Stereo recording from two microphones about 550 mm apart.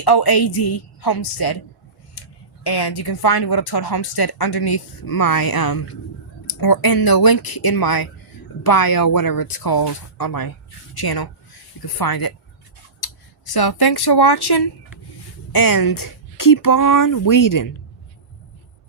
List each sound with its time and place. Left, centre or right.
0.0 s speech: left
2.2 s a sound: left
2.6 s speech: left